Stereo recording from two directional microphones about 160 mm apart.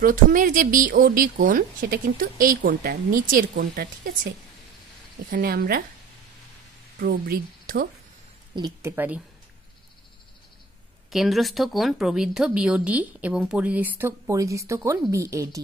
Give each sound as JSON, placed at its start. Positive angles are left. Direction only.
{"t": 0.0, "sound": "speech", "side_deg": -55}
{"t": 5.3, "sound": "speech", "side_deg": -75}
{"t": 7.0, "sound": "a woman's voice", "side_deg": -70}
{"t": 8.5, "sound": "speech", "side_deg": -25}
{"t": 8.9, "sound": "speech", "side_deg": -10}
{"t": 11.1, "sound": "speech", "side_deg": 0}